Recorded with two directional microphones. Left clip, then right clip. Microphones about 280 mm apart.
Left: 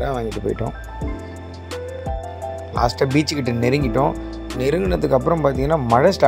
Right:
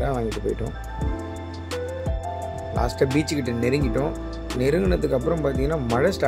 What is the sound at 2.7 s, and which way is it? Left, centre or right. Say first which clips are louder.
Speech: left 4 dB; centre.